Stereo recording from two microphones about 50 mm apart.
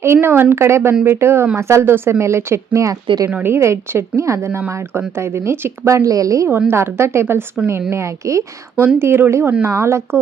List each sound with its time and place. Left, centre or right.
0.0 s speech: right
0.5 s speech: right
3.4 s speech: right
4.7 s speech: right
6.7 s speech: right
8.0 s a woman's voice: right
8.7 s speech: right
9.0 s speech: right